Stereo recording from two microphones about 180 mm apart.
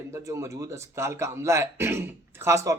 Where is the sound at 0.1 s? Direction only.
20° right (ahead or behind).